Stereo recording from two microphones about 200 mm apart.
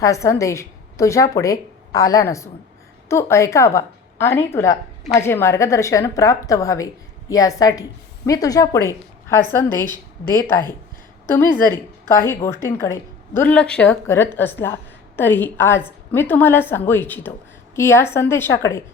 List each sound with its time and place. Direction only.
0.0 s a woman's voice: 15° left (ahead or behind)
11.3 s a woman's voice: 10° left (ahead or behind)